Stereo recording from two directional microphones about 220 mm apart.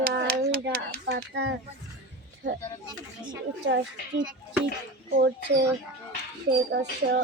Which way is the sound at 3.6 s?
50° right (ahead or behind).